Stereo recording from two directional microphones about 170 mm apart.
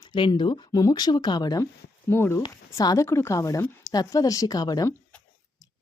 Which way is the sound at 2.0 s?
15° left (ahead or behind).